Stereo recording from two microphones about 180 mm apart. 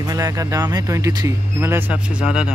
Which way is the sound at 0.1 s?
20° right (ahead or behind).